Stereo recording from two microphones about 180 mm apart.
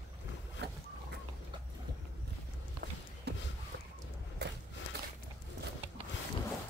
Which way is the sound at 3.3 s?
65° right (ahead or behind).